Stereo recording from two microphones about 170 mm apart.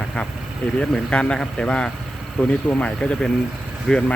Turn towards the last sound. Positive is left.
turn(degrees=5)  # may be behind; listen again after turning